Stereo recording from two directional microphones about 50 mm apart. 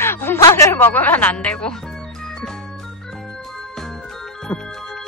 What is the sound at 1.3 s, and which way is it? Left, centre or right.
Music, centre.